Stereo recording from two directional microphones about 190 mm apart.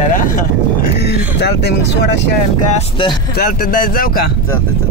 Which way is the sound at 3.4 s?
50° left (ahead or behind).